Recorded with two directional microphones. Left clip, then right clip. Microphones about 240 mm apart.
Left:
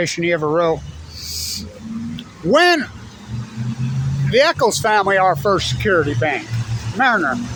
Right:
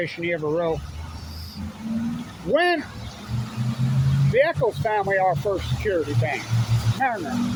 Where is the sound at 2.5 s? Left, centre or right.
Left.